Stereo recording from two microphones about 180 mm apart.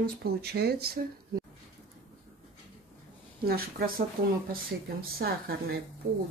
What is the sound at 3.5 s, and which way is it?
Speech, 55° right (ahead or behind).